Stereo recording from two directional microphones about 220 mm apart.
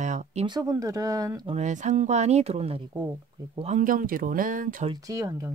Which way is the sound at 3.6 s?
35° right (ahead or behind).